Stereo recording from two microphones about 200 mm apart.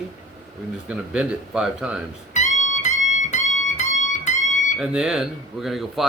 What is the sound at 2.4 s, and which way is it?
Music, 35° left (ahead or behind).